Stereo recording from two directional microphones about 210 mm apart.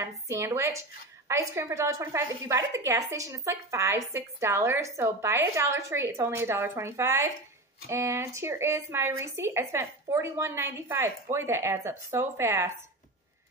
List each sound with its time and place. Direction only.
0.0 s a woman's voice: 15° right (ahead or behind)